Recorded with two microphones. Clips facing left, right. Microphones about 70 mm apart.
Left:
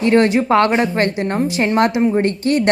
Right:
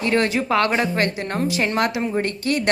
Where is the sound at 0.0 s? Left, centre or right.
Left.